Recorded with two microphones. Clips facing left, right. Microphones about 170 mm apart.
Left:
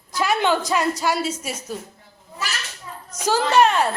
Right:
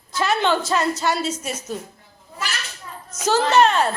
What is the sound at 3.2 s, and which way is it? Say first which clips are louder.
Speech: right 1 dB; 10° left (ahead or behind).